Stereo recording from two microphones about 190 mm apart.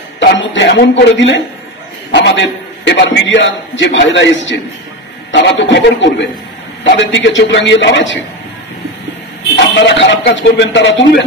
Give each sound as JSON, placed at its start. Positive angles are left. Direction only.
{"t": 0.2, "sound": "a man's voice", "side_deg": 75}
{"t": 9.8, "sound": "a man's voice", "side_deg": 70}